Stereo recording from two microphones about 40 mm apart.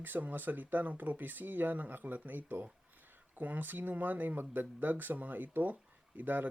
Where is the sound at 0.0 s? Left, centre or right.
Right.